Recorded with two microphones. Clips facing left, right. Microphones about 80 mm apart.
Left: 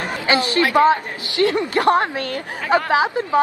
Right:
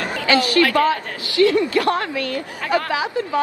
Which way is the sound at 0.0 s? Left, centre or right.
Left.